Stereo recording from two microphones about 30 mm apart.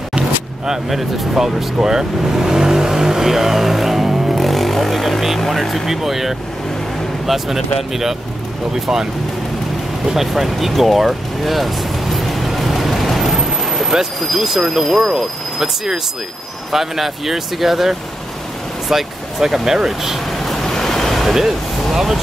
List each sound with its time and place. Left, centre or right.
0.8 s speech: centre
4.4 s vehicle: centre
5.5 s speech: centre
10.0 s speech: centre
10.8 s music: centre
13.9 s speech: centre
16.7 s speech: centre
20.2 s vehicle: centre
20.9 s waves: centre